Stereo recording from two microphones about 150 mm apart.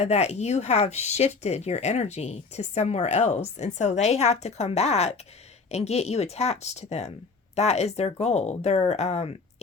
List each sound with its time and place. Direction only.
0.0 s speech: 45° left (ahead or behind)